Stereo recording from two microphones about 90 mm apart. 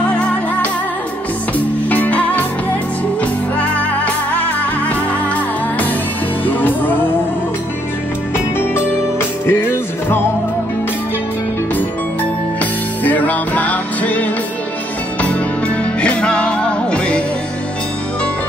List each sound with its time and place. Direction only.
0.1 s music: 15° left (ahead or behind)
1.9 s music: 15° left (ahead or behind)
3.5 s music: 15° left (ahead or behind)
6.4 s music: 20° left (ahead or behind)
9.5 s music: 25° left (ahead or behind)
13.0 s music: 15° left (ahead or behind)
15.8 s music: 15° left (ahead or behind)